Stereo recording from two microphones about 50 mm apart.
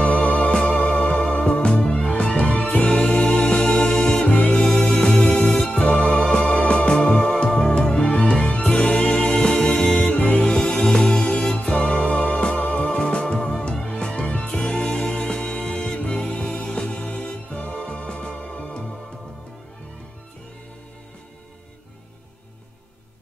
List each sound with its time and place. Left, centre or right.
0.0 s music: left
6.2 s music: centre
11.7 s music: left